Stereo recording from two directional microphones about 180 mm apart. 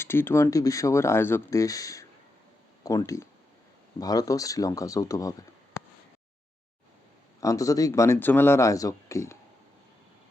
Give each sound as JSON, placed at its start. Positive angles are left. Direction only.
{"t": 0.0, "sound": "speech", "side_deg": 15}
{"t": 7.4, "sound": "speech", "side_deg": 20}